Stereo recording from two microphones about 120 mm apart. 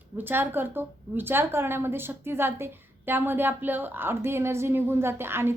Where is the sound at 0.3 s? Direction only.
20° right (ahead or behind).